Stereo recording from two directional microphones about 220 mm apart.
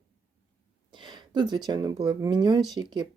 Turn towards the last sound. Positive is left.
turn(degrees=-20)  # may be behind; listen again after turning